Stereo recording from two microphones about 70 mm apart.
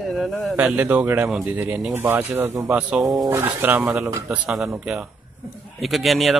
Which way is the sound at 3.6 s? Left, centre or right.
Right.